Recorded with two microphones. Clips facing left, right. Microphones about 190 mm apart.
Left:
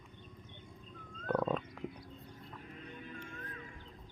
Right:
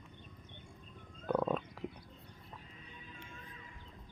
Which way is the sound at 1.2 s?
5° right (ahead or behind).